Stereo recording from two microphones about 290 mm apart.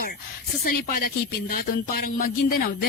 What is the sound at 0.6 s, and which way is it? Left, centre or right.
Speech, left.